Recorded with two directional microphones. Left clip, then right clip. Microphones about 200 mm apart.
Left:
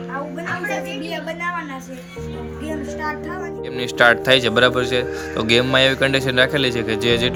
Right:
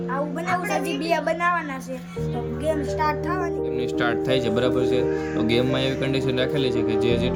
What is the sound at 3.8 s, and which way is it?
Speech, 15° left (ahead or behind).